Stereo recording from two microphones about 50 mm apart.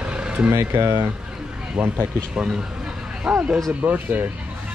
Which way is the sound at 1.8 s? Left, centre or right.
Right.